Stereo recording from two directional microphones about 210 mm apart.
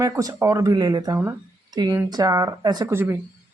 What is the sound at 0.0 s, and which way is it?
Speech, 15° right (ahead or behind).